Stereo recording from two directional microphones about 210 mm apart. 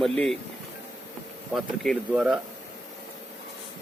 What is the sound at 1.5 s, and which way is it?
Speech, 5° right (ahead or behind).